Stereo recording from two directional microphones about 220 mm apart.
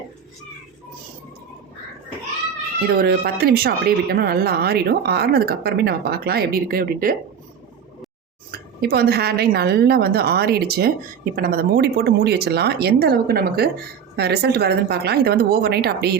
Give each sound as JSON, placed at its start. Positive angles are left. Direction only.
{"t": 3.0, "sound": "speech", "side_deg": -45}
{"t": 8.4, "sound": "speech", "side_deg": -45}